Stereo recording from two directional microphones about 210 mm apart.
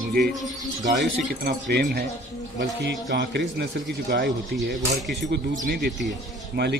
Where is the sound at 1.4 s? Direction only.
50° right (ahead or behind).